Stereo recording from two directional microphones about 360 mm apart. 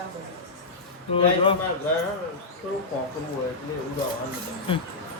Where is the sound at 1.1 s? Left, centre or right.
Centre.